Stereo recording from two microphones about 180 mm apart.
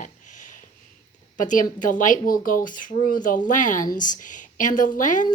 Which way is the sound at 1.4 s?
45° left (ahead or behind).